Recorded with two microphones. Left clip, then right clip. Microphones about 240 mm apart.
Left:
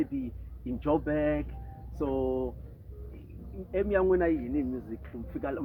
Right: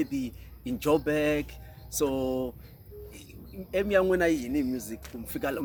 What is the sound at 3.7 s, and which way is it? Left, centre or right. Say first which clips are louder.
Speech: right 2 dB; right.